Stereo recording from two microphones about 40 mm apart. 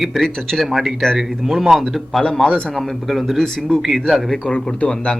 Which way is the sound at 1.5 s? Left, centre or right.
Centre.